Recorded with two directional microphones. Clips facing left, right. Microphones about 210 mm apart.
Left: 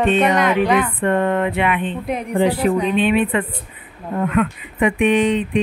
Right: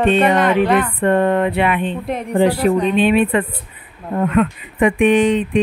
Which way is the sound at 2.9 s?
40° right (ahead or behind).